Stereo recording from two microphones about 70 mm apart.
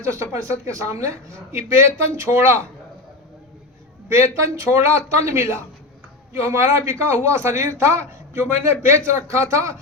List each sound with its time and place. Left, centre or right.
0.0 s speech: right
4.1 s speech: right